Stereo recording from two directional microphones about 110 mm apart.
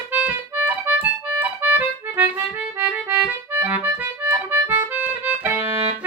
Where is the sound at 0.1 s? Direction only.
15° right (ahead or behind).